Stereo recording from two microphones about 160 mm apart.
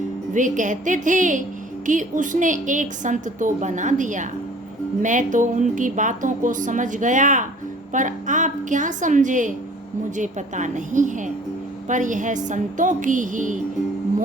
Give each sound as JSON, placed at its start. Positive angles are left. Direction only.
{"t": 0.3, "sound": "a woman's voice", "side_deg": -50}